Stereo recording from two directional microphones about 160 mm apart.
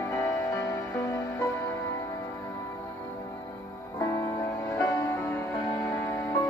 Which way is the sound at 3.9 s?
20° left (ahead or behind).